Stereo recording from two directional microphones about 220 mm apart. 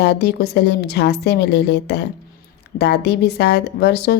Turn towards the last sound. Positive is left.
turn(degrees=50)  # may be behind; listen again after turning